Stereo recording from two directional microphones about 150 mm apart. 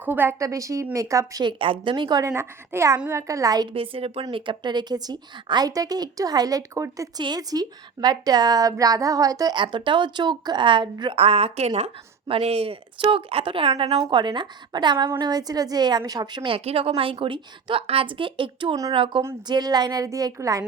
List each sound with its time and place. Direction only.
0.0 s a woman's voice: 15° right (ahead or behind); by 13.9 s 40° right (ahead or behind)
13.9 s a woman's voice: 30° right (ahead or behind)